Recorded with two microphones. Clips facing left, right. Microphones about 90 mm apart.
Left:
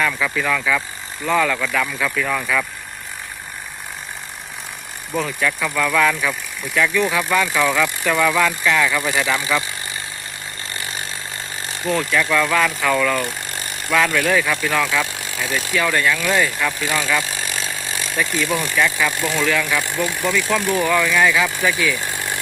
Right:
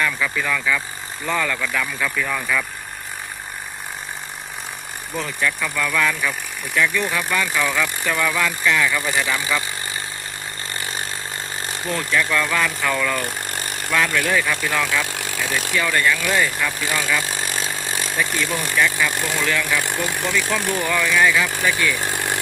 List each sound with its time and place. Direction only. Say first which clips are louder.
0.0 s speech: left 2 dB; 5° left (ahead or behind)
5.1 s speech: left 3 dB; 5° left (ahead or behind)
11.9 s speech: left 3 dB; centre (ahead or behind)
13.2 s vehicle: even; 40° right (ahead or behind)
13.9 s speech: left 3 dB; centre (ahead or behind)
17.2 s chainsaw: right 1 dB; 40° right (ahead or behind)
18.3 s speech: left 2 dB; centre (ahead or behind)
20.8 s speech: left 4 dB; 15° left (ahead or behind)
21.1 s speech: left 1 dB; centre (ahead or behind)